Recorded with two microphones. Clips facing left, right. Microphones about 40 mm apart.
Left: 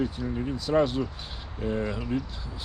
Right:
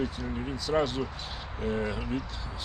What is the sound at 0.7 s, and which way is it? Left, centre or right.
Speech, centre.